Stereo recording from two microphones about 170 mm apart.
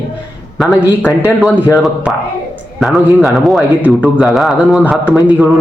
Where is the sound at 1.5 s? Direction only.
20° left (ahead or behind).